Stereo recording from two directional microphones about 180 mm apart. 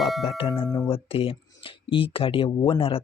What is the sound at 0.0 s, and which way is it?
Speech, centre (ahead or behind).